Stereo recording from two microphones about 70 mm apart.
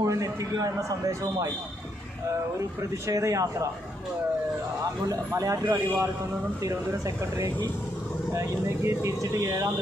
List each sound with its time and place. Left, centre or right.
0.0 s a man's voice: right
3.1 s a man's voice: right
5.0 s a man's voice: right